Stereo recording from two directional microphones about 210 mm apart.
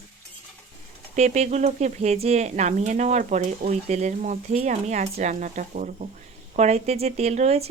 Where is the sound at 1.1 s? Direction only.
35° right (ahead or behind).